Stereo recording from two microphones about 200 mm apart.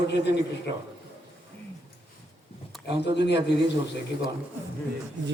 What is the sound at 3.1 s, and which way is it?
Speech, 60° left (ahead or behind).